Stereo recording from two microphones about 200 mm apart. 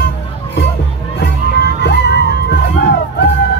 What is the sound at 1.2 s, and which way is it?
Music, 55° left (ahead or behind).